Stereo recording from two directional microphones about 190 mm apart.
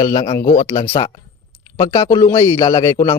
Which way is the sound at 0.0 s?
20° left (ahead or behind).